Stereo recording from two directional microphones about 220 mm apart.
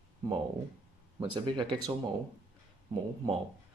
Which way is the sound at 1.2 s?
20° right (ahead or behind).